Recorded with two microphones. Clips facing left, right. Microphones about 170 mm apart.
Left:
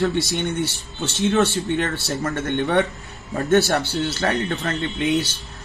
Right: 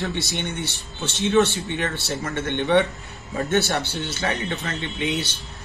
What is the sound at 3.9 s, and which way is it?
Speech, 45° left (ahead or behind).